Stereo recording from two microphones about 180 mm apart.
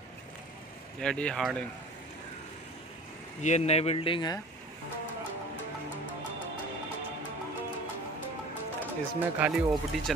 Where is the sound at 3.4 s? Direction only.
40° left (ahead or behind).